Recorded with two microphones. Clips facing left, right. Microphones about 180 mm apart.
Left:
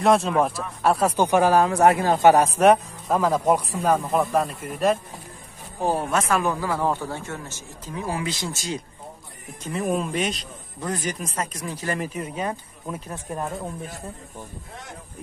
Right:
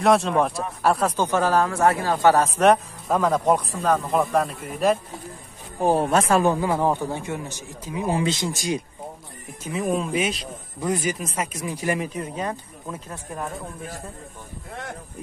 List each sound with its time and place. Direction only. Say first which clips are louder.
0.0 s speech: even; centre (ahead or behind)
1.0 s speech: left 3 dB; 15° left (ahead or behind); by 4.9 s centre (ahead or behind)
5.9 s a man's voice: right 5 dB; 30° right (ahead or behind); by 8.8 s 15° right (ahead or behind)
9.6 s a man's voice: even; centre (ahead or behind)
12.0 s speech: even; 10° left (ahead or behind)